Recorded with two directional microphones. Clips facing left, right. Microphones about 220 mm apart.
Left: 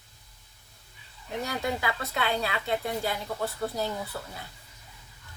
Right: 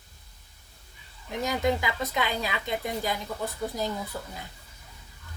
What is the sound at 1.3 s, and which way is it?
A woman's voice, 15° right (ahead or behind).